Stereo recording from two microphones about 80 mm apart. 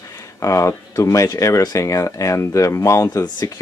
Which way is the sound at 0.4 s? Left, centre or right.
Left.